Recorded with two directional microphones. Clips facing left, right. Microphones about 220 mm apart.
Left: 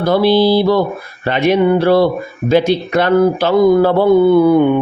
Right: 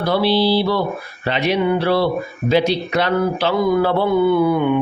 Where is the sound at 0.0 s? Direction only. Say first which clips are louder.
Left 5 dB; 45° left (ahead or behind).